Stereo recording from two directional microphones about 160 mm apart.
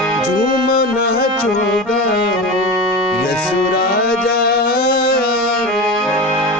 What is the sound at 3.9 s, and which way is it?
Music, 70° left (ahead or behind).